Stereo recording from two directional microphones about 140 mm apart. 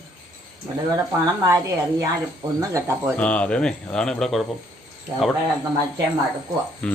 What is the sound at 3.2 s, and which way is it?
Speech, 10° left (ahead or behind).